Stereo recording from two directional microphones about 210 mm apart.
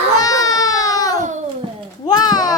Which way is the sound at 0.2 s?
15° left (ahead or behind).